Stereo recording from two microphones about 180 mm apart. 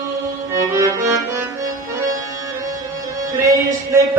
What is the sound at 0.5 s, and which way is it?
Music, 15° right (ahead or behind).